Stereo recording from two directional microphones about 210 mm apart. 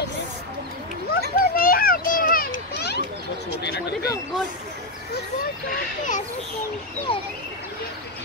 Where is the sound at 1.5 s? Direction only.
45° left (ahead or behind).